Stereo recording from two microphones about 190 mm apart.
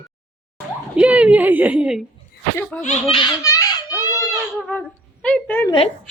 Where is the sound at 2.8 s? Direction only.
35° left (ahead or behind).